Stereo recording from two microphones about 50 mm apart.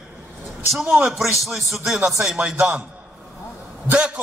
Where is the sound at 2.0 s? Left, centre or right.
Centre.